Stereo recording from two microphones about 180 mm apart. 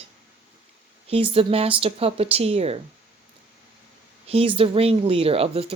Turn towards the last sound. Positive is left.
turn(degrees=-30)  # may be behind; listen again after turning